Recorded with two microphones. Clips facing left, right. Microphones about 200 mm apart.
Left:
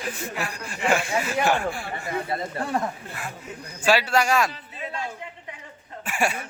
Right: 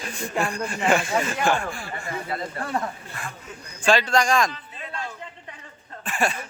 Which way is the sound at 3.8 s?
5° left (ahead or behind).